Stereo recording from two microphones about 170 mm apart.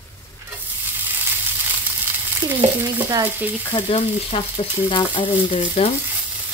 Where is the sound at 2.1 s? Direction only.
15° right (ahead or behind).